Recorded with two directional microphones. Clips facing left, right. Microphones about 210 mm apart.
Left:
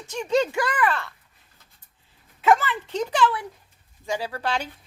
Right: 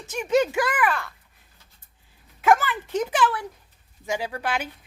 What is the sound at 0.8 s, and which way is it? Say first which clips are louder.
Speech: even; centre (ahead or behind).